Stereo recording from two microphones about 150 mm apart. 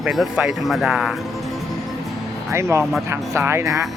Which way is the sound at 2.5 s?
20° right (ahead or behind).